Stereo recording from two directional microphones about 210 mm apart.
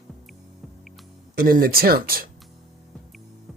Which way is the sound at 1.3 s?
45° right (ahead or behind).